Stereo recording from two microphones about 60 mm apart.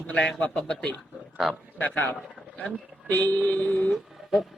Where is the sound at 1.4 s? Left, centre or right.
Centre.